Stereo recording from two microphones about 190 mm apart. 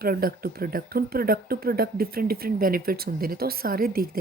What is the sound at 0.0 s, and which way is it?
Speech, 50° right (ahead or behind).